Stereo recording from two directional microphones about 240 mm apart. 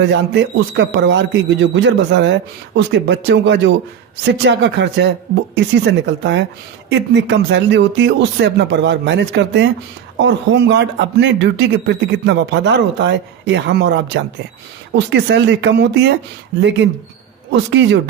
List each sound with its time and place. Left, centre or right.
0.0 s a man's voice: right